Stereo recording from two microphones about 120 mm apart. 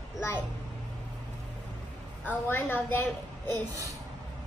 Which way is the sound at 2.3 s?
15° left (ahead or behind).